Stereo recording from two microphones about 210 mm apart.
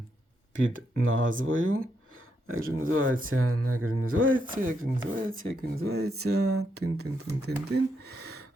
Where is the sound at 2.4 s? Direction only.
80° right.